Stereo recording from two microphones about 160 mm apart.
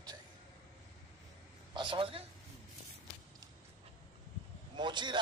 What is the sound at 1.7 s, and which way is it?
Speech, 30° right (ahead or behind).